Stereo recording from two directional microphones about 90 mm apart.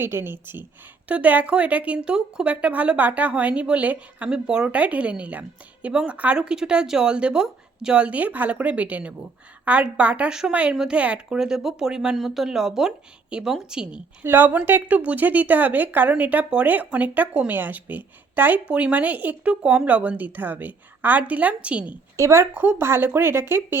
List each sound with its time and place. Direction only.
0.0 s a woman's voice: 25° right (ahead or behind)
14.3 s speech: 25° right (ahead or behind)
22.1 s speech: 35° right (ahead or behind)